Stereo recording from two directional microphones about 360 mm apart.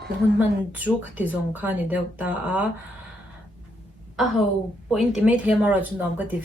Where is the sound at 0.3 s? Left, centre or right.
Centre.